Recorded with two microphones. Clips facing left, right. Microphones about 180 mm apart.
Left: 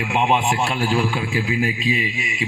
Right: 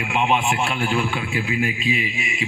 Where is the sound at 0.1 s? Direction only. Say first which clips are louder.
Left 1 dB; 30° left (ahead or behind).